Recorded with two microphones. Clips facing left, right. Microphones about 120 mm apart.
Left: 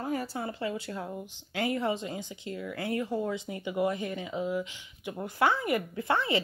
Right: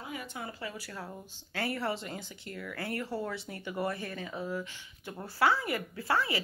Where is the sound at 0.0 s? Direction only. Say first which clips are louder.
Left 8 dB; 40° left (ahead or behind).